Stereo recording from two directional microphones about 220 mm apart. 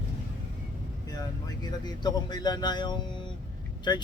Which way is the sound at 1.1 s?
15° left (ahead or behind).